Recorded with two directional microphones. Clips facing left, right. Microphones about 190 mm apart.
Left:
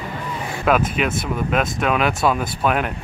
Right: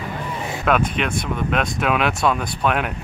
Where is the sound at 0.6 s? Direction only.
5° left (ahead or behind).